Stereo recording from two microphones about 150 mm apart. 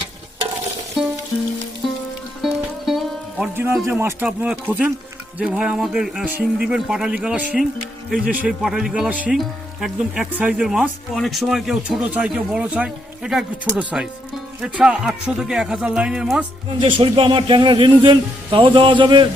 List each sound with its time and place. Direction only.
1.0 s music: 5° right (ahead or behind)
2.4 s music: centre (ahead or behind)
3.8 s speech: 15° right (ahead or behind)
16.8 s speech: 35° right (ahead or behind)